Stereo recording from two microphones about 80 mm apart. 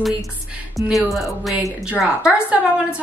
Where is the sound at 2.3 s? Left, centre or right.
Centre.